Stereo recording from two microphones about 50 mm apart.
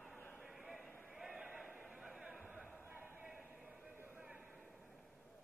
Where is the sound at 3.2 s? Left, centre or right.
Right.